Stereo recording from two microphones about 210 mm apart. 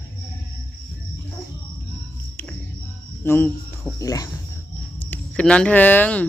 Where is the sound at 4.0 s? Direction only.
15° left (ahead or behind).